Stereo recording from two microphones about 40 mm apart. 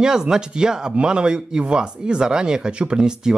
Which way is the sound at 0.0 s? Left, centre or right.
Centre.